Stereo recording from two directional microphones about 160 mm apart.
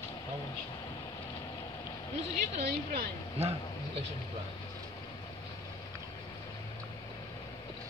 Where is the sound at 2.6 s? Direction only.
75° right (ahead or behind).